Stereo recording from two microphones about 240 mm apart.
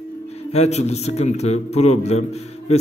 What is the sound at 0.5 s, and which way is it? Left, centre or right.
A man's voice, left.